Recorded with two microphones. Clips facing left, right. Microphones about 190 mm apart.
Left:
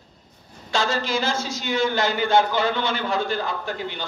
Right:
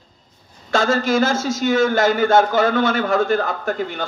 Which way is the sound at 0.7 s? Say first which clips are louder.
Right 7 dB; 50° right (ahead or behind).